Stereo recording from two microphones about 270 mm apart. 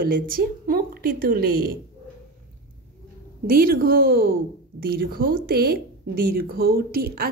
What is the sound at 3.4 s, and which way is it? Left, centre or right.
A woman's voice, right.